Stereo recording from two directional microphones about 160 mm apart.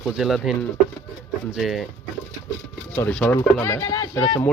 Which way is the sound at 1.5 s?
Centre (ahead or behind).